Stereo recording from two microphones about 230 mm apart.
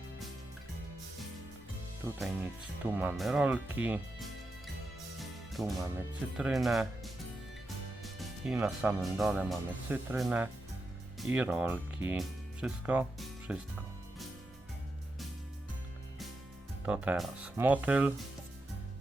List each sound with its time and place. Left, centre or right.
2.1 s speech: centre
5.2 s music: centre
6.3 s speech: centre
8.0 s music: centre
8.5 s speech: centre
16.8 s speech: centre